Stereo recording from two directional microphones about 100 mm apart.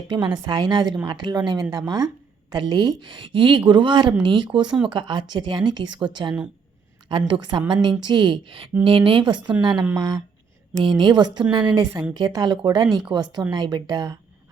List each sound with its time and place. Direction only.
0.1 s a woman's voice: 50° right (ahead or behind)